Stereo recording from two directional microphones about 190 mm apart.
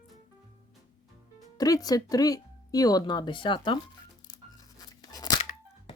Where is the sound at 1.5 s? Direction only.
20° left (ahead or behind).